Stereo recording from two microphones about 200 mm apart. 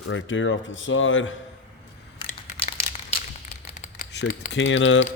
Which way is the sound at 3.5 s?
35° left (ahead or behind).